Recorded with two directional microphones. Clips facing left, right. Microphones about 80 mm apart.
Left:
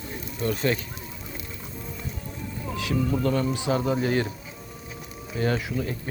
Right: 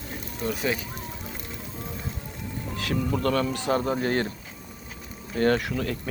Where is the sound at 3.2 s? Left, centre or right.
Right.